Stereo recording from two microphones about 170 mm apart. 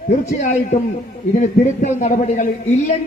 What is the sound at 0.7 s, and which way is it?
A man's voice, 40° left (ahead or behind).